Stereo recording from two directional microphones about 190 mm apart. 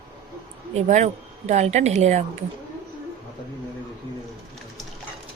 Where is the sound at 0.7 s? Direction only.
35° right (ahead or behind).